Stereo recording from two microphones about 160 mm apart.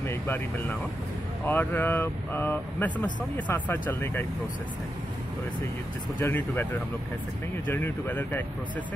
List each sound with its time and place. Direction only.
0.0 s speech: 15° left (ahead or behind)
6.1 s speech: 15° left (ahead or behind)